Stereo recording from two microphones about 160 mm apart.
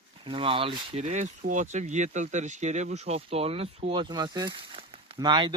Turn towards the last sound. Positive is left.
turn(degrees=-30)  # may be behind; listen again after turning